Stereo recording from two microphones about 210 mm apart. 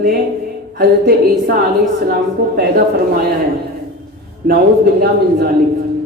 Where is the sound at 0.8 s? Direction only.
45° right (ahead or behind).